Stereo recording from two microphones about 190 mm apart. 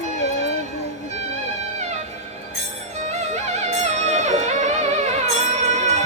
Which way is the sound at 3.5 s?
35° right (ahead or behind).